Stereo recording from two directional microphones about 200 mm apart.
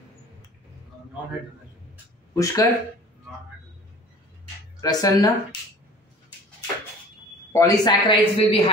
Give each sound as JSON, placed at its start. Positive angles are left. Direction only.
{"t": 2.3, "sound": "speech", "side_deg": 15}
{"t": 4.7, "sound": "speech", "side_deg": 20}
{"t": 7.5, "sound": "speech", "side_deg": 20}